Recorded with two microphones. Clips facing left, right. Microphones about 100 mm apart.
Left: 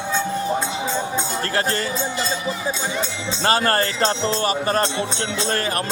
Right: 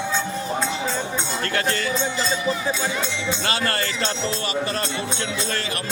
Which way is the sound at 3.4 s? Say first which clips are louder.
Left 9 dB; 40° left (ahead or behind).